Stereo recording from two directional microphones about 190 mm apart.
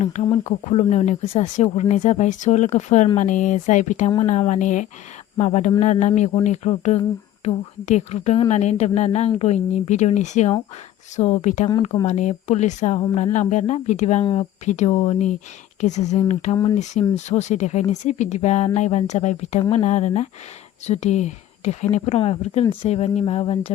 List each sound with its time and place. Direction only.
0.0 s speech: 35° left (ahead or behind)